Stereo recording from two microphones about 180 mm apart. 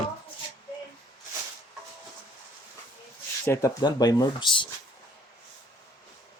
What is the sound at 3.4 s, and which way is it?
Speech, 15° left (ahead or behind).